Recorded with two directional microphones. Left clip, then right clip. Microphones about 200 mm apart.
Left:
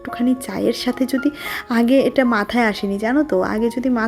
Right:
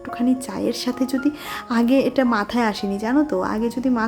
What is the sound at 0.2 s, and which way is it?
A woman's voice, 20° left (ahead or behind).